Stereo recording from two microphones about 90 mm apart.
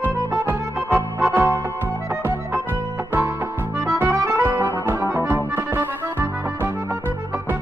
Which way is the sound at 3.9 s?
25° right (ahead or behind).